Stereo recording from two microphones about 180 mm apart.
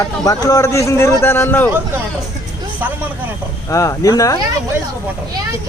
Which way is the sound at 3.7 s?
15° left (ahead or behind).